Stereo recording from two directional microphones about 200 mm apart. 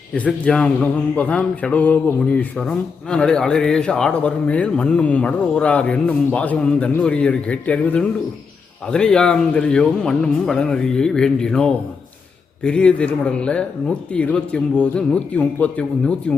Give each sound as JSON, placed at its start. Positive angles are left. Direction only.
{"t": 0.1, "sound": "speech", "side_deg": 5}